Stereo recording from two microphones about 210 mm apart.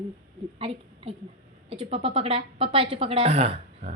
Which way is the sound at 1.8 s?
25° right (ahead or behind).